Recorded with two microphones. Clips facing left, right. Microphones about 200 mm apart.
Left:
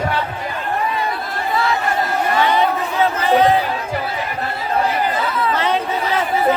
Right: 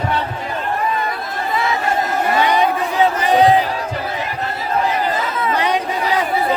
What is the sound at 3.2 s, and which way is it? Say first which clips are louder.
Crowd: even; 15° right (ahead or behind).